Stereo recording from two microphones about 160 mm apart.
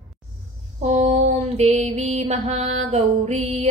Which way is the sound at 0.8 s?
45° right (ahead or behind).